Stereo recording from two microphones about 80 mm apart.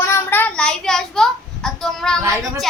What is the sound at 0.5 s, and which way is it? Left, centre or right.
A woman's voice, centre.